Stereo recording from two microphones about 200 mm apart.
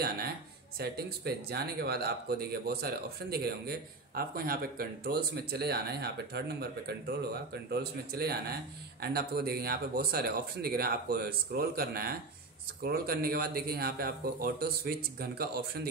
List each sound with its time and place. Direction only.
0.7 s speech: 50° right (ahead or behind)